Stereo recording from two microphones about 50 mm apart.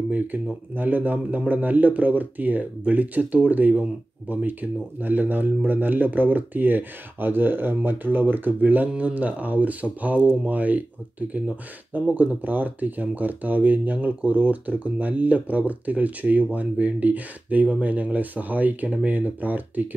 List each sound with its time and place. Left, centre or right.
0.7 s speech: right